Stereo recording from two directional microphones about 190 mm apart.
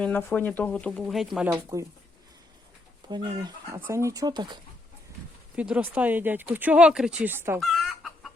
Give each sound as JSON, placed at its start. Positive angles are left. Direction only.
{"t": 0.0, "sound": "speech", "side_deg": 10}
{"t": 1.7, "sound": "speech", "side_deg": -15}
{"t": 3.1, "sound": "speech", "side_deg": -25}
{"t": 5.5, "sound": "speech", "side_deg": -5}
{"t": 7.6, "sound": "chicken", "side_deg": 0}